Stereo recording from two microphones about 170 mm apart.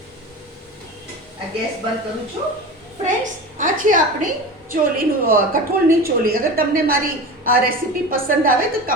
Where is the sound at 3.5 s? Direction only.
50° right (ahead or behind).